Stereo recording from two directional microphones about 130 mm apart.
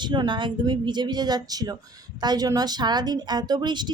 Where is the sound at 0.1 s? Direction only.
35° right (ahead or behind).